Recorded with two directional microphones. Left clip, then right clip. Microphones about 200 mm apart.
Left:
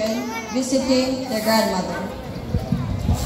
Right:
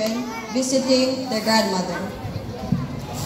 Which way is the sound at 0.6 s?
55° right (ahead or behind).